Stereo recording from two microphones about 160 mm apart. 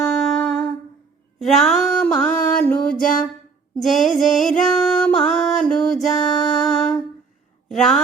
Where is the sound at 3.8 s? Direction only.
Centre (ahead or behind).